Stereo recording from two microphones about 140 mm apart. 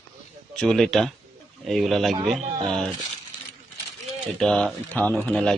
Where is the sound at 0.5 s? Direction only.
5° left (ahead or behind).